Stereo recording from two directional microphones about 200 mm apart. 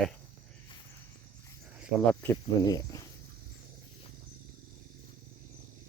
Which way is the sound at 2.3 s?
20° left (ahead or behind).